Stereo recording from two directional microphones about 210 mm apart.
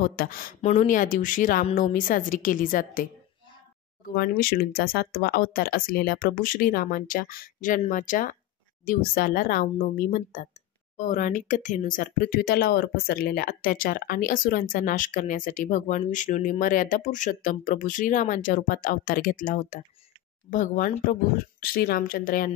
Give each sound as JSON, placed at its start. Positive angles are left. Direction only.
{"t": 0.0, "sound": "speech", "side_deg": 45}